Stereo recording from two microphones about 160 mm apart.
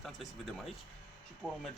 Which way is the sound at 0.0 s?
Centre (ahead or behind).